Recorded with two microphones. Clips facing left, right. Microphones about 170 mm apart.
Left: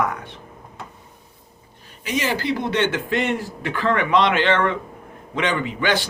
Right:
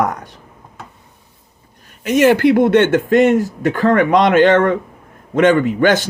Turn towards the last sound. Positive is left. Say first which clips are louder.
# right 8 dB
turn(degrees=-45)  # may be behind; listen again after turning